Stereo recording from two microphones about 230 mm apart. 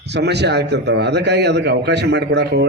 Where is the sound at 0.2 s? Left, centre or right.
Right.